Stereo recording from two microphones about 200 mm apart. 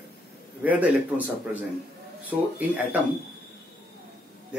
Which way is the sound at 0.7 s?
10° right (ahead or behind).